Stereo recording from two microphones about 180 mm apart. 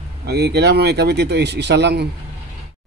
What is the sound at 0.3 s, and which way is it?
Speech, 65° right (ahead or behind).